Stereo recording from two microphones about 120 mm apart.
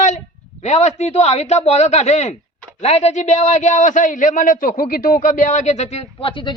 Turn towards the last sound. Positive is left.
turn(degrees=45)  # may be behind; listen again after turning